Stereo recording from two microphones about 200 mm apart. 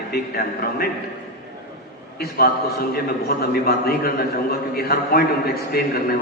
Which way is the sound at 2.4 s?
50° left (ahead or behind).